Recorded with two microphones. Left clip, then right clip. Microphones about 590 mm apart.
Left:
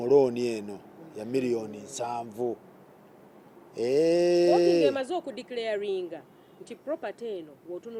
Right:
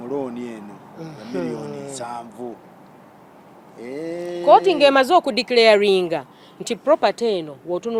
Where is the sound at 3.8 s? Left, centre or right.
Left.